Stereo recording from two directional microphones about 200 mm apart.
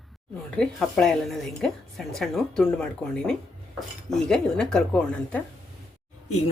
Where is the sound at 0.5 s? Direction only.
5° left (ahead or behind).